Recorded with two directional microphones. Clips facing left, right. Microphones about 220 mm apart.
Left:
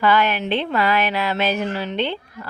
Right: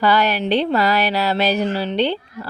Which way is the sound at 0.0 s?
35° right (ahead or behind).